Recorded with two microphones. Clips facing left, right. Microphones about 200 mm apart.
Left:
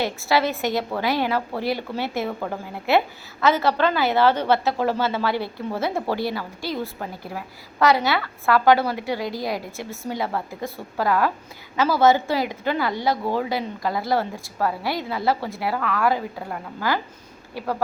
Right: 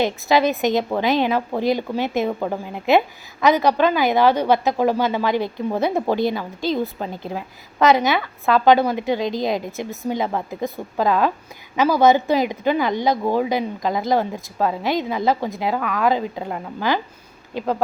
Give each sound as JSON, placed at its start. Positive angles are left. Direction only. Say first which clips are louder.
{"t": 0.0, "sound": "a woman's voice", "louder": "right 4 dB", "side_deg": -20}